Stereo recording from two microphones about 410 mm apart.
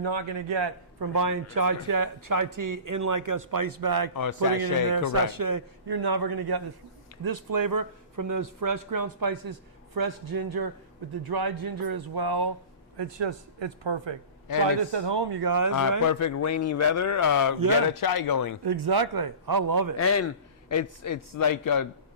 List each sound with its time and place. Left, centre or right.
0.0 s speech: right
1.1 s speech: right
4.1 s a man's voice: left
4.6 s a man's voice: right
13.0 s speech: right
14.9 s speech: right
16.0 s a man's voice: left
18.6 s a man's voice: right
20.0 s speech: left
20.7 s a man's voice: left